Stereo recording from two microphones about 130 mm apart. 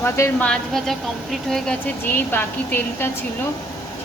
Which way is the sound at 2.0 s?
15° left (ahead or behind).